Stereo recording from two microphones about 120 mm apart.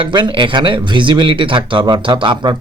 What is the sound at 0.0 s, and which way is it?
Speech, 40° right (ahead or behind).